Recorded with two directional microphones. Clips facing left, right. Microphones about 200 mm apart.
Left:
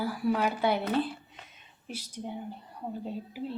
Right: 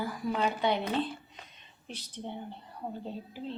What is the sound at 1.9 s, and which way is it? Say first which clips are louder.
Speech: left 2 dB; 10° left (ahead or behind).